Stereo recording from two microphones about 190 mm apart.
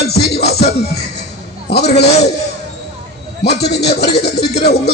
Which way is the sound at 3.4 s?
60° left (ahead or behind).